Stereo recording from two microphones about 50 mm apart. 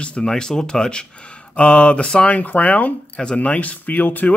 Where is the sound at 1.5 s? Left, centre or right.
Left.